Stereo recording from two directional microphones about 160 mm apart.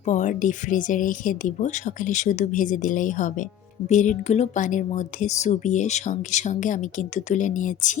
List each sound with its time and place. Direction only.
0.0 s speech: 50° left (ahead or behind)